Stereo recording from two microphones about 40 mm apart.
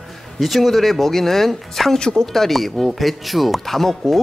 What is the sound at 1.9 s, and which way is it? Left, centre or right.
Speech, centre.